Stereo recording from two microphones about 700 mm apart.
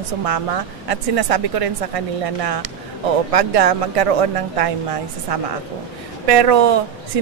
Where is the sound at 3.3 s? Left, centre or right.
Right.